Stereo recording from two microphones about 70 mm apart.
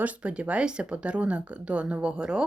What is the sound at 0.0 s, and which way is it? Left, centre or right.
Speech, centre.